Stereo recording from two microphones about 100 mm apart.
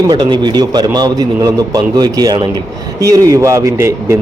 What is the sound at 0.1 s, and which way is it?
A man's voice, 45° right (ahead or behind).